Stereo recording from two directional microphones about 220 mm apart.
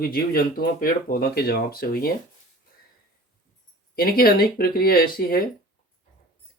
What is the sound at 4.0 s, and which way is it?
Speech, 40° left (ahead or behind).